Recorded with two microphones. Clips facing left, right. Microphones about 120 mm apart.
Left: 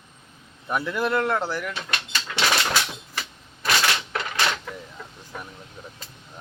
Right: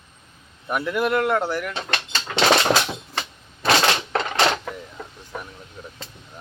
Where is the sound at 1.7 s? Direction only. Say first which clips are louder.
Right 3 dB; 35° right (ahead or behind).